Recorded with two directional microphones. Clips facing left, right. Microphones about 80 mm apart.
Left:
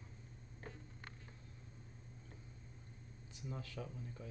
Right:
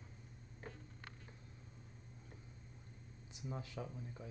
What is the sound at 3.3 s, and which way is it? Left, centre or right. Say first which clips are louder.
Speech: right 1 dB; right.